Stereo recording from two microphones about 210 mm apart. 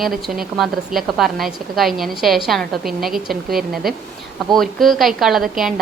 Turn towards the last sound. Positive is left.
turn(degrees=0)  # may be behind; listen again after turning